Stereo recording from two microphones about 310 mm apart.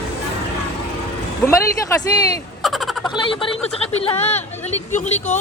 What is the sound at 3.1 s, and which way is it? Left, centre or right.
Speech, centre.